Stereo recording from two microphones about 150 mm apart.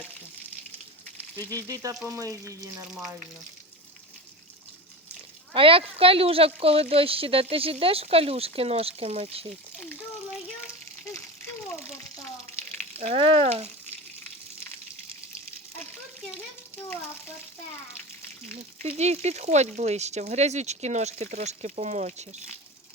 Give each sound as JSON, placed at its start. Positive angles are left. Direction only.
{"t": 1.4, "sound": "frying", "side_deg": 15}
{"t": 1.6, "sound": "frying", "side_deg": -25}
{"t": 2.9, "sound": "speech", "side_deg": -5}
{"t": 5.5, "sound": "speech", "side_deg": -40}
{"t": 9.7, "sound": "a sound", "side_deg": 10}
{"t": 13.0, "sound": "speech", "side_deg": -45}
{"t": 16.7, "sound": "a child's voice", "side_deg": 15}
{"t": 18.5, "sound": "speech", "side_deg": -45}